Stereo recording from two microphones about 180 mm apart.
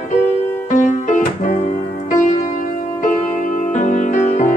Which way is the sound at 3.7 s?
45° left (ahead or behind).